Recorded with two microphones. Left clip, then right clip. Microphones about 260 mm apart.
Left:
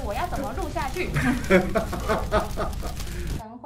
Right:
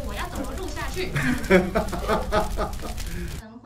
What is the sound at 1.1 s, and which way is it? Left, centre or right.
Speech, centre.